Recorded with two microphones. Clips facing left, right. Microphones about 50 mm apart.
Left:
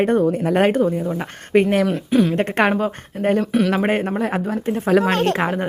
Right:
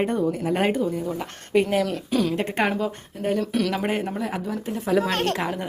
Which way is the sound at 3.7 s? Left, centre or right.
Left.